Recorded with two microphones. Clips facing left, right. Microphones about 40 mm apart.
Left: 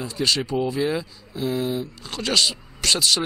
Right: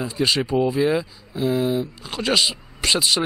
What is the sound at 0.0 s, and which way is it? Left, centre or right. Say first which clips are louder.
Speech: right 2 dB; centre.